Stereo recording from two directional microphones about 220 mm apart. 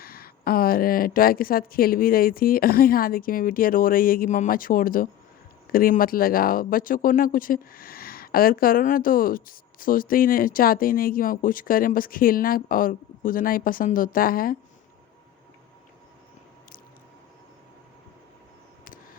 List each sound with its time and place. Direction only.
0.0 s speech: 40° left (ahead or behind)